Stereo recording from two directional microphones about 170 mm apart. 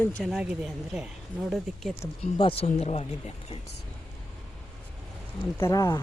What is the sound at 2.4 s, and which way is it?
Speech, 35° left (ahead or behind).